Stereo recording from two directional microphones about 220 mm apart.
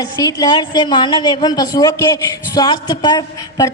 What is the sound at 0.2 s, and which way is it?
A woman's voice, 15° left (ahead or behind).